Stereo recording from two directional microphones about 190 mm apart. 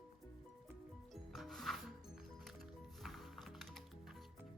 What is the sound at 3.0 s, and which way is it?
Music, centre (ahead or behind).